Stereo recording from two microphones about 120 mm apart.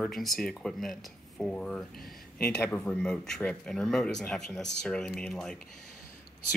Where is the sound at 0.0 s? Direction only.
5° left (ahead or behind).